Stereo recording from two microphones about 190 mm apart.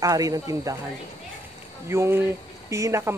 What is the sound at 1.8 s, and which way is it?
Speech, 15° right (ahead or behind).